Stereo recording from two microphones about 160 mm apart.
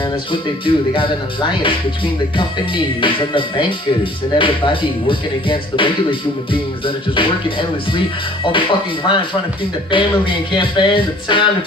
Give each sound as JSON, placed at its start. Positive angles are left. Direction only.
{"t": 0.3, "sound": "speech", "side_deg": 30}
{"t": 2.3, "sound": "speech", "side_deg": 30}
{"t": 5.0, "sound": "speech", "side_deg": 35}